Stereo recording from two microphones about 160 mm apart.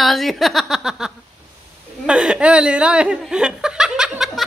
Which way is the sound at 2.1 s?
5° right (ahead or behind).